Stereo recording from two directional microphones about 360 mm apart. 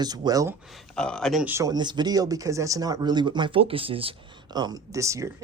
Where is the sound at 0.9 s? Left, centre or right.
Centre.